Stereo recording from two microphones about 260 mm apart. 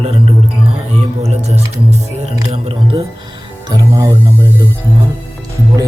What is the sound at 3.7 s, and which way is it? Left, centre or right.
Speech, centre.